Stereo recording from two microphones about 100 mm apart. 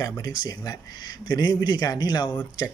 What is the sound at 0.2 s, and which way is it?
Speech, 35° left (ahead or behind).